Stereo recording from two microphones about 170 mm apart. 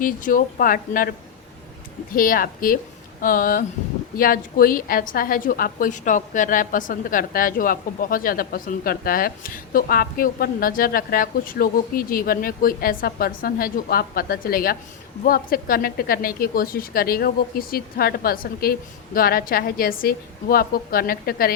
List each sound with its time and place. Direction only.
0.0 s speech: 55° left (ahead or behind)
2.1 s a woman's voice: 55° left (ahead or behind)